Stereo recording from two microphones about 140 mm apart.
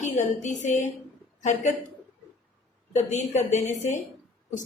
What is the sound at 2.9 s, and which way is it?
A woman's voice, 55° left (ahead or behind).